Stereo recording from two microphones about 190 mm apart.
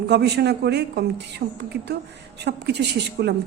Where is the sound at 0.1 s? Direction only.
60° right (ahead or behind).